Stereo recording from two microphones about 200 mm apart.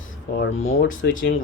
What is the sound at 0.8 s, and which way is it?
Speech, 70° left (ahead or behind).